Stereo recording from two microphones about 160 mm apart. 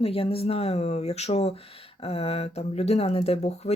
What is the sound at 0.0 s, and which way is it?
Speech, 35° left (ahead or behind).